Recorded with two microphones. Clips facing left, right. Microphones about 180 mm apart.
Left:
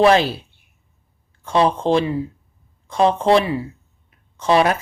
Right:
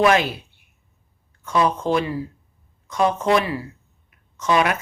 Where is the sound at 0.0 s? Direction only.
30° left (ahead or behind).